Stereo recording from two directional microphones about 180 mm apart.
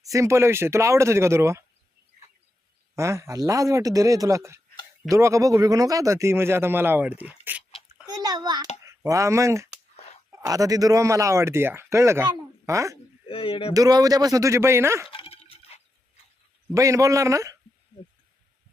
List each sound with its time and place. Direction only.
0.0 s speech: 15° right (ahead or behind)
2.9 s speech: 15° right (ahead or behind)
8.2 s a child's voice: 20° right (ahead or behind)
9.9 s a sound: 35° left (ahead or behind)
10.4 s speech: 20° right (ahead or behind)
13.2 s speech: 30° left (ahead or behind)
13.7 s speech: 20° right (ahead or behind)
15.1 s dog: 30° left (ahead or behind)
16.7 s speech: 15° right (ahead or behind)